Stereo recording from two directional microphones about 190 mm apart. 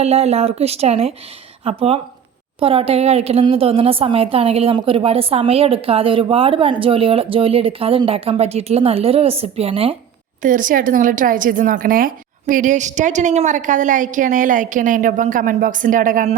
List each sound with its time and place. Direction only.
0.0 s a woman's voice: 35° right (ahead or behind)
10.4 s a woman's voice: 45° right (ahead or behind)